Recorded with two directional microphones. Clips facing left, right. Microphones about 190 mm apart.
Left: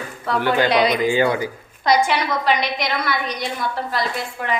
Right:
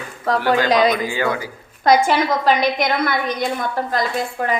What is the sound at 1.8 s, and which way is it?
A woman's voice, 50° right (ahead or behind).